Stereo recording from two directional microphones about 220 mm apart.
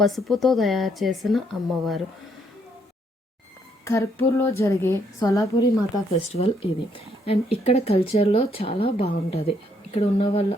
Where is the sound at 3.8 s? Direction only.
15° left (ahead or behind).